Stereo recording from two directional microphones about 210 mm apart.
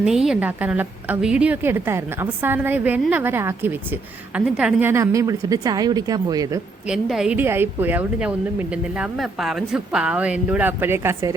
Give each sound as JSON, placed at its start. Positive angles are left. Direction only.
{"t": 0.0, "sound": "speech", "side_deg": 0}
{"t": 6.8, "sound": "speech", "side_deg": 0}